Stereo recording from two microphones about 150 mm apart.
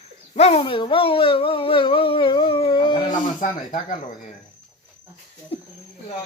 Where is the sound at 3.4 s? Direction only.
60° left (ahead or behind).